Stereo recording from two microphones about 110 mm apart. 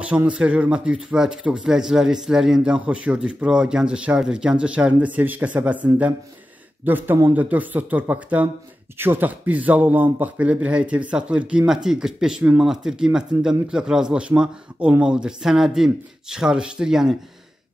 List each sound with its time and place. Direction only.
0.0 s speech: 10° right (ahead or behind)